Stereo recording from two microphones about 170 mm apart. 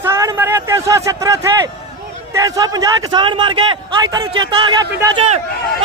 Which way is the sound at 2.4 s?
20° right (ahead or behind).